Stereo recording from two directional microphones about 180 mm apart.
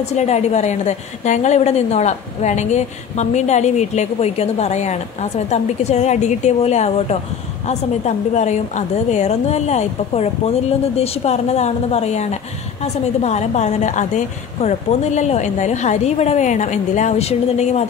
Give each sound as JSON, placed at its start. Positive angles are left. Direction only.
{"t": 0.0, "sound": "a woman's voice", "side_deg": 40}